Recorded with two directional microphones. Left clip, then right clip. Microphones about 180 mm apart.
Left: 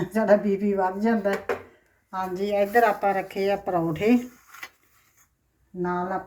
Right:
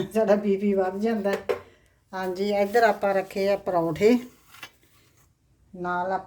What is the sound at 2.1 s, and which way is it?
Speech, 40° right (ahead or behind).